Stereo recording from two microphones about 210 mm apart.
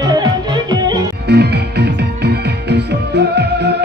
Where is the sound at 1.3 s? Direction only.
50° right (ahead or behind).